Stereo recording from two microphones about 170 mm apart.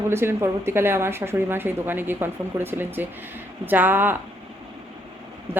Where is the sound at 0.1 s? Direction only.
15° right (ahead or behind).